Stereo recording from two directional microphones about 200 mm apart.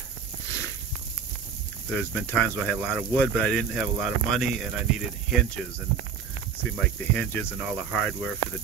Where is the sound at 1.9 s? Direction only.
5° left (ahead or behind).